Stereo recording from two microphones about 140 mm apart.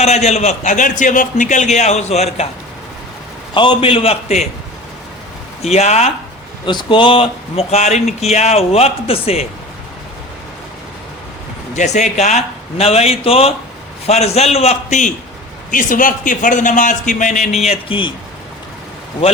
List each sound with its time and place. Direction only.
0.0 s a man's voice: 50° left (ahead or behind)
3.5 s speech: 35° left (ahead or behind)
5.6 s speech: 50° left (ahead or behind)
6.7 s speech: 35° left (ahead or behind)
11.7 s speech: 55° left (ahead or behind)
15.7 s a man's voice: 70° left (ahead or behind)
17.6 s speech: 45° left (ahead or behind)